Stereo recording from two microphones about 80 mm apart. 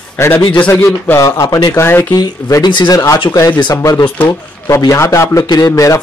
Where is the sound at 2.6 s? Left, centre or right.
Left.